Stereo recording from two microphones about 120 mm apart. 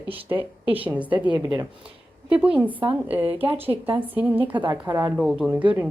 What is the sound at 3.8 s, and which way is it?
Speech, 50° right (ahead or behind).